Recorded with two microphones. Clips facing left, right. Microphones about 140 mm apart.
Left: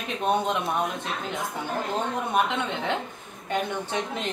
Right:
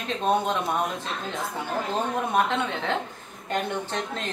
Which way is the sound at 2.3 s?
15° left (ahead or behind).